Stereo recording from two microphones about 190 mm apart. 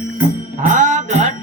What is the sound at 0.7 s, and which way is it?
Music, 40° right (ahead or behind).